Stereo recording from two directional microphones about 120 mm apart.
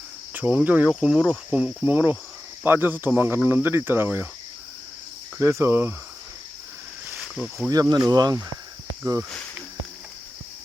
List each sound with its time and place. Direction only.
0.3 s speech: 10° right (ahead or behind)
5.4 s cricket: 20° right (ahead or behind)
7.2 s speech: 5° right (ahead or behind)
7.7 s speech: 30° right (ahead or behind)